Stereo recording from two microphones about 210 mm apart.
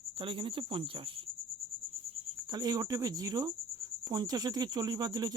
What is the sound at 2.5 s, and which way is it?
Speech, 20° right (ahead or behind).